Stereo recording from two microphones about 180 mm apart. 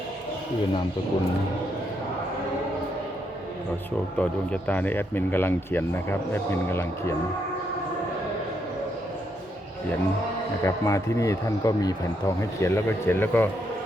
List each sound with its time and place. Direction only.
4.2 s speech: 10° left (ahead or behind)
10.6 s speech: 15° left (ahead or behind)